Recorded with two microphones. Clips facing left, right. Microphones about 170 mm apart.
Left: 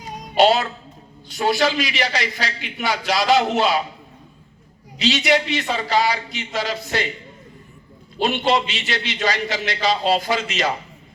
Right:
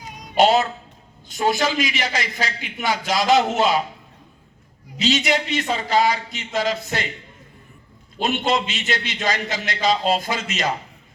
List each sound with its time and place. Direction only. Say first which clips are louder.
0.3 s a man's voice: even; 45° right (ahead or behind)
4.9 s a man's voice: left 2 dB; 45° right (ahead or behind)
8.2 s a man's voice: left 2 dB; 50° right (ahead or behind)